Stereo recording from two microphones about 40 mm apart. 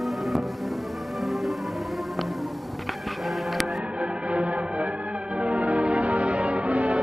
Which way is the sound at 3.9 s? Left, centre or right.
Right.